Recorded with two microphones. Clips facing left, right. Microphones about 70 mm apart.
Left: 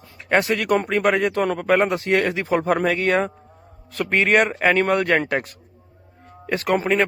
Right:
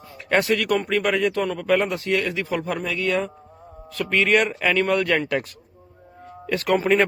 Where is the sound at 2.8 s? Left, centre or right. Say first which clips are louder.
Left 4 dB; left.